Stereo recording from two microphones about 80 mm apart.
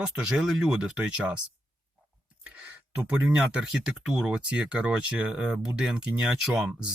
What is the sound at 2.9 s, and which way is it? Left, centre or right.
Speech, right.